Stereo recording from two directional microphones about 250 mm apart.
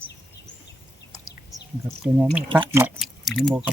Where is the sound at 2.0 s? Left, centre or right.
Centre.